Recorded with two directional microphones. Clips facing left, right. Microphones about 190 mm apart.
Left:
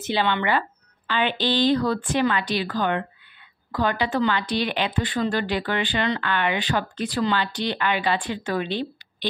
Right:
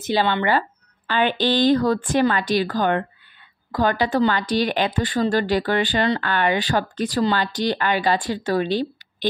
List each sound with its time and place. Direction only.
0.0 s speech: 40° right (ahead or behind)